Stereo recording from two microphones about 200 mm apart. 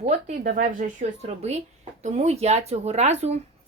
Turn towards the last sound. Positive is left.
turn(degrees=-35)  # may be behind; listen again after turning